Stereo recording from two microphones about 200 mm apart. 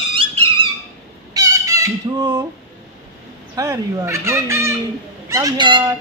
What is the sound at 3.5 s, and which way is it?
Speech, 15° right (ahead or behind).